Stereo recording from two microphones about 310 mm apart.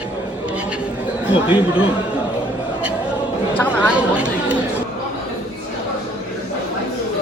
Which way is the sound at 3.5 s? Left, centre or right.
Centre.